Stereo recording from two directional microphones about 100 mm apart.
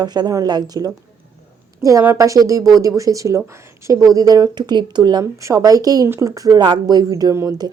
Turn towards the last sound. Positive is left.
turn(degrees=-30)  # may be behind; listen again after turning